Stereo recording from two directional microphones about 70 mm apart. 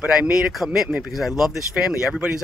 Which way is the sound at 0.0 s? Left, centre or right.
Centre.